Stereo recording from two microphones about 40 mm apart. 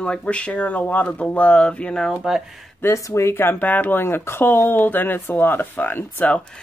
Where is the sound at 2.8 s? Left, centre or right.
Left.